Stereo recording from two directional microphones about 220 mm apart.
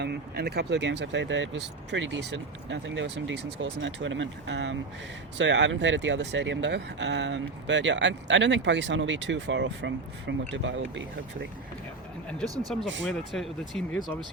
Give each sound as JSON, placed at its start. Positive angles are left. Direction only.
{"t": 0.0, "sound": "speech", "side_deg": -45}
{"t": 12.4, "sound": "speech", "side_deg": 0}